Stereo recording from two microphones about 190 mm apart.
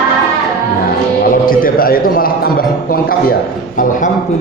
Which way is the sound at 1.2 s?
50° left (ahead or behind).